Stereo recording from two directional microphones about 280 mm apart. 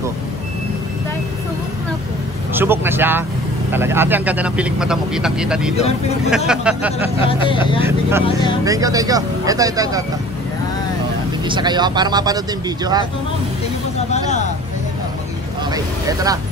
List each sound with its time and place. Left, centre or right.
2.5 s speech: centre
7.2 s speech: centre
8.6 s speech: centre
11.4 s speech: centre
15.7 s speech: centre